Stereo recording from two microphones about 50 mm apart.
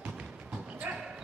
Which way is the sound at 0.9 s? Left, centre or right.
Right.